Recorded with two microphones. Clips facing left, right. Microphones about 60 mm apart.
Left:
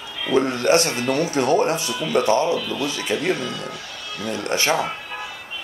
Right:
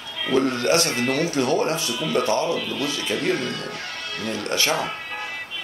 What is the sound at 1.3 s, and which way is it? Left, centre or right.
Speech, left.